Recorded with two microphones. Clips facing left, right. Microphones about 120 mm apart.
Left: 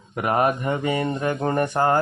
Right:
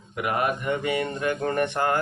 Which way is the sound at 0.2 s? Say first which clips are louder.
Left 5 dB; 40° left (ahead or behind).